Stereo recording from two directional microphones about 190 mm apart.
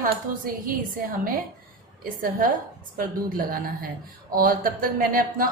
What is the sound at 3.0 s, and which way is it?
A woman's voice, 50° right (ahead or behind).